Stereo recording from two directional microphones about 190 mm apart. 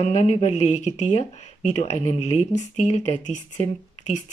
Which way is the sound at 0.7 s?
35° left (ahead or behind).